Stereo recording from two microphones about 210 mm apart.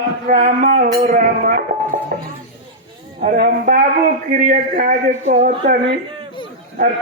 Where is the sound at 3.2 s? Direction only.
40° right (ahead or behind).